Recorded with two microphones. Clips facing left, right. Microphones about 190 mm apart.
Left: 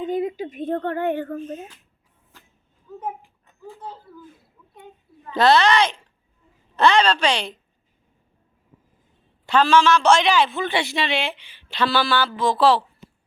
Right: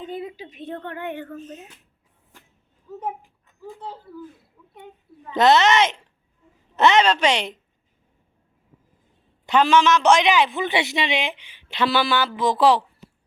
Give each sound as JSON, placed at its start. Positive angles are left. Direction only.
{"t": 0.1, "sound": "speech", "side_deg": 45}
{"t": 5.3, "sound": "a man's voice", "side_deg": -20}
{"t": 9.5, "sound": "a man's voice", "side_deg": -20}